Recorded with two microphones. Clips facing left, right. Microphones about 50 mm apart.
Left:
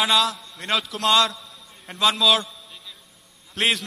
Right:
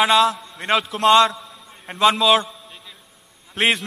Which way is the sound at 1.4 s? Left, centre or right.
Centre.